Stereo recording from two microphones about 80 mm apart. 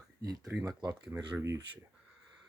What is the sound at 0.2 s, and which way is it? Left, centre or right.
Speech, right.